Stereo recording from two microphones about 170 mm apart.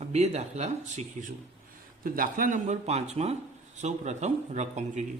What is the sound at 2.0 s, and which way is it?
Speech, 55° right (ahead or behind).